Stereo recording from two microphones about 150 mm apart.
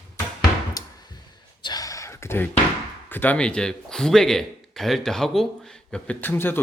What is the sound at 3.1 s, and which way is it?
Speech, 10° left (ahead or behind).